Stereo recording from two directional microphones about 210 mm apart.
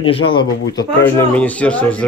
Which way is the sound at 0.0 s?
25° left (ahead or behind).